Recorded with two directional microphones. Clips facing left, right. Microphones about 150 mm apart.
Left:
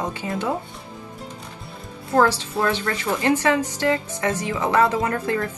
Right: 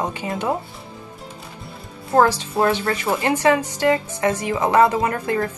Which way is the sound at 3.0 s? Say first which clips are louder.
Right 1 dB; 15° right (ahead or behind).